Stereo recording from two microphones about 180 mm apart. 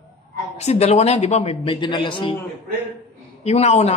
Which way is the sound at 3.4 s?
35° left (ahead or behind).